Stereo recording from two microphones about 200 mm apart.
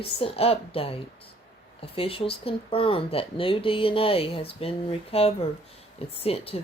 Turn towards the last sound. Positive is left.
turn(degrees=30)  # may be behind; listen again after turning